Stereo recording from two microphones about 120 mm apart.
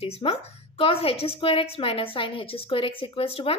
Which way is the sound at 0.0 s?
55° left (ahead or behind).